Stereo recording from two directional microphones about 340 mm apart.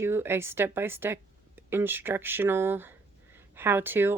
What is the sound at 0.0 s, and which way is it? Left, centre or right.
Speech, centre.